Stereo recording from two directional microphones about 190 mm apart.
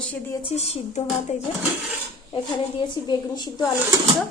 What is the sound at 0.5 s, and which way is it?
Speech, 35° left (ahead or behind).